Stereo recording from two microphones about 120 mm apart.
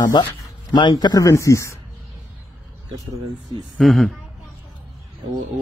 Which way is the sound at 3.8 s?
Centre (ahead or behind).